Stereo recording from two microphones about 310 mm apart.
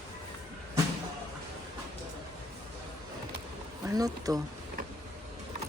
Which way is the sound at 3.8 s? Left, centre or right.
Centre.